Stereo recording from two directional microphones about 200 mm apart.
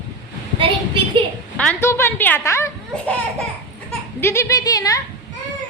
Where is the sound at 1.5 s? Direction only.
10° left (ahead or behind).